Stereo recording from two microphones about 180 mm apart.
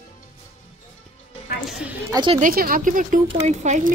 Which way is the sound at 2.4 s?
50° right (ahead or behind).